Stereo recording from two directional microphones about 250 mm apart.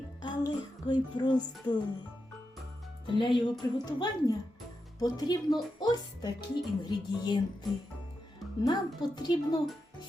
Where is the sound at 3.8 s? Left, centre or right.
Centre.